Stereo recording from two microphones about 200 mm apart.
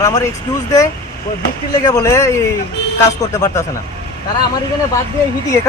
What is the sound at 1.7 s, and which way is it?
Speech, 15° left (ahead or behind).